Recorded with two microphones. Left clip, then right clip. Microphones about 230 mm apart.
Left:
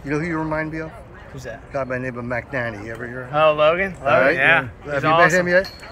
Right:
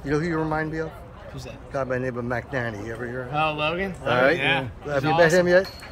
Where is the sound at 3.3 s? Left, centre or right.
Centre.